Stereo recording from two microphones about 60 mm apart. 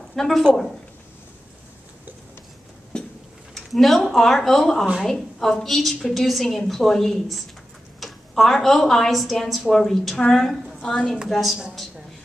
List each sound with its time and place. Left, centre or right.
0.1 s speech: centre
2.9 s a sound: centre
3.5 s a woman's voice: centre
10.9 s speech: centre
11.2 s a woman's voice: centre